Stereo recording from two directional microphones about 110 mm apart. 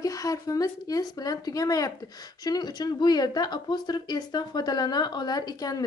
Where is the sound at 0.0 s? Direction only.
30° left (ahead or behind).